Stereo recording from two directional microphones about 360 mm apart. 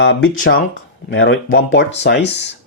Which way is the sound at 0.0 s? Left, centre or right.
Left.